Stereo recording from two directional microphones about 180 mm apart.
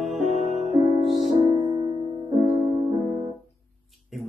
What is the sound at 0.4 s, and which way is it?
Music, 40° left (ahead or behind).